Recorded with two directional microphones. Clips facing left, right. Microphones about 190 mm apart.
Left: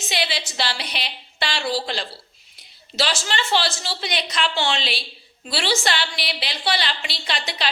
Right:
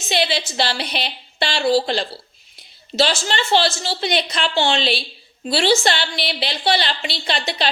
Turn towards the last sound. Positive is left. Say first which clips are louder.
# right 5 dB
turn(degrees=-30)  # may be behind; listen again after turning